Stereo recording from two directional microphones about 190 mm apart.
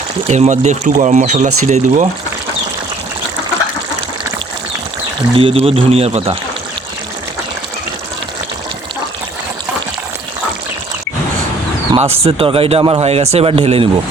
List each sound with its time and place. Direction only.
0.3 s speech: 35° right (ahead or behind)
5.4 s speech: 30° right (ahead or behind)
11.9 s speech: 30° right (ahead or behind)